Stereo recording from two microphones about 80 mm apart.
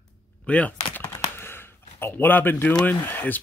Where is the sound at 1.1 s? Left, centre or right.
Left.